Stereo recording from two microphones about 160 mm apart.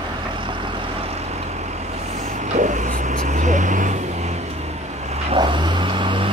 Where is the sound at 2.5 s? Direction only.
50° right (ahead or behind).